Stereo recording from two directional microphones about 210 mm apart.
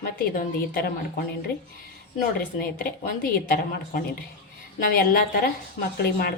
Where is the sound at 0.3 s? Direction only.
45° left (ahead or behind).